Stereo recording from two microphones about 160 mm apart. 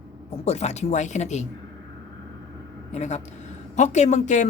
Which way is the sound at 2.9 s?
45° left (ahead or behind).